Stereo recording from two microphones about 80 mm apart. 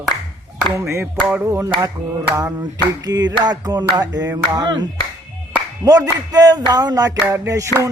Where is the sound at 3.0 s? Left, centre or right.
Right.